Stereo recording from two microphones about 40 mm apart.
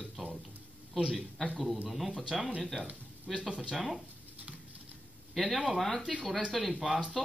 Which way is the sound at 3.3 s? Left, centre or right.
Right.